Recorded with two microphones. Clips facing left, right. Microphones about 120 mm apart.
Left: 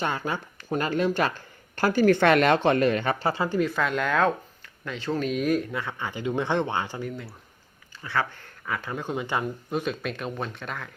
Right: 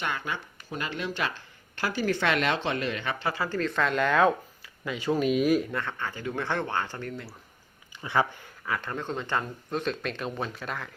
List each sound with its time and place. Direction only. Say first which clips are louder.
0.0 s speech: left 4 dB; 35° left (ahead or behind)
3.3 s speech: left 4 dB; 20° left (ahead or behind)
3.7 s speech: even; centre (ahead or behind)
4.9 s speech: right 2 dB; 10° right (ahead or behind)
8.0 s speech: right 2 dB; 15° right (ahead or behind)
8.6 s speech: left 1 dB; centre (ahead or behind)